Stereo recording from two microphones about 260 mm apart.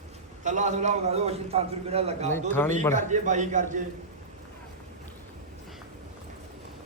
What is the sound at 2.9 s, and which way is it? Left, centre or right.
Speech, right.